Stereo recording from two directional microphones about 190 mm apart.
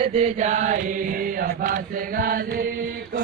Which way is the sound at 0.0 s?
35° right (ahead or behind).